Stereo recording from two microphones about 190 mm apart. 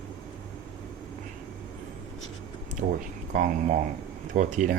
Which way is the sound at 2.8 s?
45° right (ahead or behind).